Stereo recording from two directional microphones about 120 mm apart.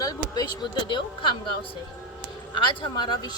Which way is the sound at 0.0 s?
30° left (ahead or behind).